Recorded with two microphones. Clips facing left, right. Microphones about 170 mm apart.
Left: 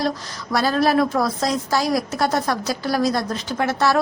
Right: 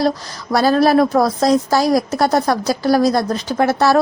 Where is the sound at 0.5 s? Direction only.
40° right (ahead or behind).